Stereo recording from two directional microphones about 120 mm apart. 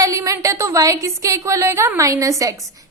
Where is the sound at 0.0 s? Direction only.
25° right (ahead or behind).